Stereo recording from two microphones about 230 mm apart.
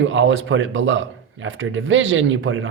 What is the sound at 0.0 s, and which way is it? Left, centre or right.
A man's voice, right.